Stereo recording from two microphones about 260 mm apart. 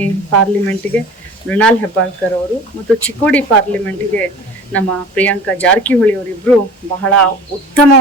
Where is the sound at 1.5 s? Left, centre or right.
Centre.